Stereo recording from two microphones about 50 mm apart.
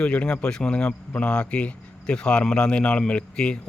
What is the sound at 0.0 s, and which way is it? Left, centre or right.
Speech, left.